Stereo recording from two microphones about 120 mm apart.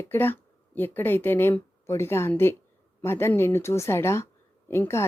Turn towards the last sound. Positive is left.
turn(degrees=20)  # may be behind; listen again after turning